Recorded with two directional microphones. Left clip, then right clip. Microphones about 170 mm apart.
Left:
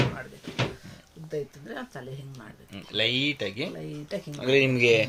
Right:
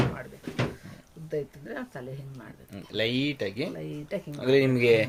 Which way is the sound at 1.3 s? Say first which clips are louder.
Right 1 dB; centre (ahead or behind).